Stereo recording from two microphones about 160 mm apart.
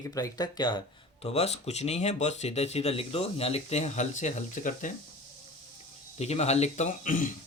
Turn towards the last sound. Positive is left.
turn(degrees=55)  # may be behind; listen again after turning